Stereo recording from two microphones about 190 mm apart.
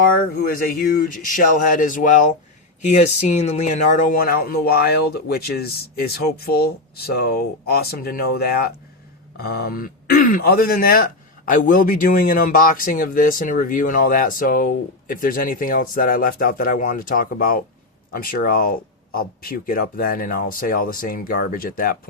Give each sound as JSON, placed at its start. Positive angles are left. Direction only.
{"t": 0.2, "sound": "speech", "side_deg": 50}